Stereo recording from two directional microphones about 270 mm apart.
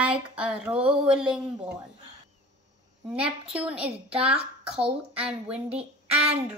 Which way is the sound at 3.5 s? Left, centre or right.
Centre.